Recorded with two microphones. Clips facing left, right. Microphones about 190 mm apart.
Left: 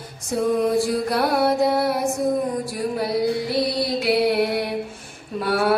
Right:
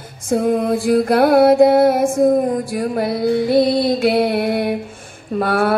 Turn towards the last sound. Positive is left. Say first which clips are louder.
# right 4 dB
turn(degrees=-55)  # may be behind; listen again after turning